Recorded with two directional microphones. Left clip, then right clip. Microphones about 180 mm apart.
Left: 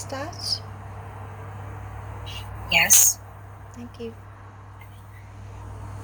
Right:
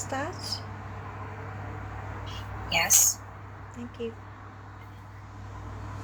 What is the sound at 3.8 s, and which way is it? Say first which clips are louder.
Speech: even; centre (ahead or behind).